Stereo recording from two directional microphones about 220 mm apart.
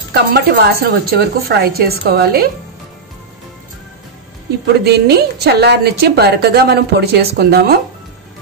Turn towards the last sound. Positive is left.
turn(degrees=-45)  # may be behind; listen again after turning